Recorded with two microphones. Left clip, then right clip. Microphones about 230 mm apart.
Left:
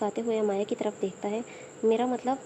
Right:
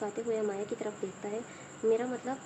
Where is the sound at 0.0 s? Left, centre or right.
Left.